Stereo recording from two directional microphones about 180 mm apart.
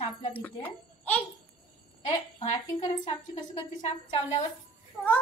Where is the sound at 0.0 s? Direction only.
35° left (ahead or behind).